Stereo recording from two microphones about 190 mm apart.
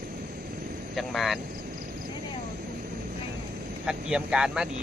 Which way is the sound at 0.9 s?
Centre (ahead or behind).